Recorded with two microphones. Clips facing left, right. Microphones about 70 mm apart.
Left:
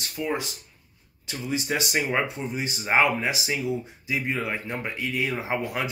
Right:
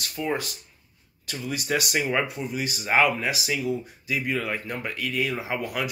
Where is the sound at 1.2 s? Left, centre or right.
Left.